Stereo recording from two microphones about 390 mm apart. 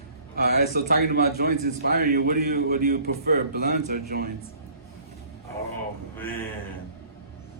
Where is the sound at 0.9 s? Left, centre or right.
Right.